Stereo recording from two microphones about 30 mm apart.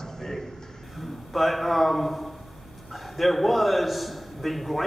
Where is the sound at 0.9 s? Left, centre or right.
Centre.